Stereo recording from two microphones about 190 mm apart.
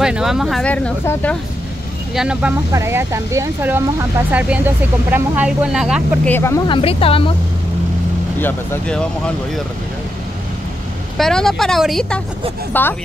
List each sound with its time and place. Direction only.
0.0 s speech: 5° right (ahead or behind)
2.1 s speech: 5° right (ahead or behind)
6.2 s speech: 10° left (ahead or behind)
6.7 s speech: 30° left (ahead or behind)
8.4 s speech: 10° left (ahead or behind)
11.1 s speech: centre (ahead or behind)